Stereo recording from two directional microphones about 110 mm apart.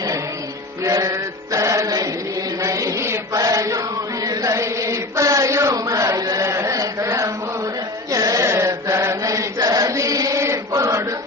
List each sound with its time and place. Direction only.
0.9 s chant: 30° right (ahead or behind)